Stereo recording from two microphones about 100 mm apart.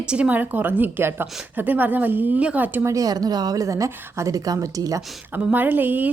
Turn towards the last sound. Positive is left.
turn(degrees=-20)  # may be behind; listen again after turning